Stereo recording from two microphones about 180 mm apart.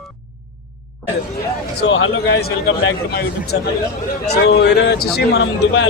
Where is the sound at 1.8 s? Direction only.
80° left; by 3.5 s 60° left (ahead or behind).